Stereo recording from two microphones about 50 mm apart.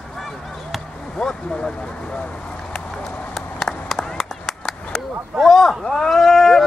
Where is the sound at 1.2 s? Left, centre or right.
Centre.